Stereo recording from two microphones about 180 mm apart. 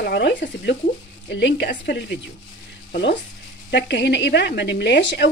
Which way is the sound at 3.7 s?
75° left (ahead or behind).